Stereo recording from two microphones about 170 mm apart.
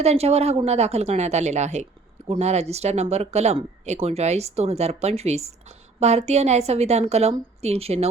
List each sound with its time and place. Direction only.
0.0 s a woman's voice: 35° right (ahead or behind)